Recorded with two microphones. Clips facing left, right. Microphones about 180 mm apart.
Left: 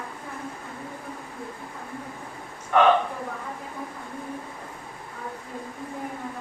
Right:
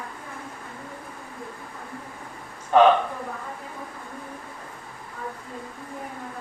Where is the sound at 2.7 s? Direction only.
30° right (ahead or behind).